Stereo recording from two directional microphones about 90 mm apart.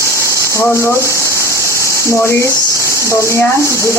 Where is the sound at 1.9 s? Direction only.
30° left (ahead or behind).